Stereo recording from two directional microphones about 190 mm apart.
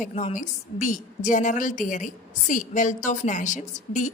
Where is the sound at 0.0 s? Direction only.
35° left (ahead or behind).